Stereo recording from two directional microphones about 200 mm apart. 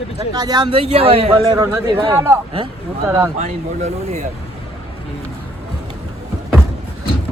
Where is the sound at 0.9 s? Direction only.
30° right (ahead or behind).